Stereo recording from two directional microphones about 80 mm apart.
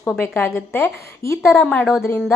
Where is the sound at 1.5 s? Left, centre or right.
Centre.